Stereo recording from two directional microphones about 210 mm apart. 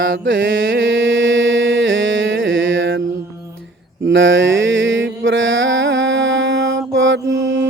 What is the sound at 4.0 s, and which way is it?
Mantra, 60° right (ahead or behind).